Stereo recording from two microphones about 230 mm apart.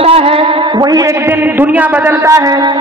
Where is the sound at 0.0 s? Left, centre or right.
Right.